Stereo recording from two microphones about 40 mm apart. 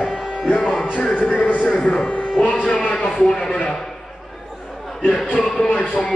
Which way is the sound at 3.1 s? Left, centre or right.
Centre.